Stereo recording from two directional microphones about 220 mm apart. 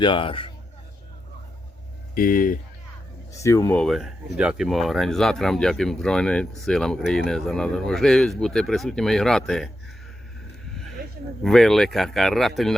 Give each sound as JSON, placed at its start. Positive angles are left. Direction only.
{"t": 0.0, "sound": "a man's voice", "side_deg": 20}
{"t": 2.1, "sound": "speech", "side_deg": 40}
{"t": 3.3, "sound": "speech", "side_deg": 15}
{"t": 11.4, "sound": "speech", "side_deg": 0}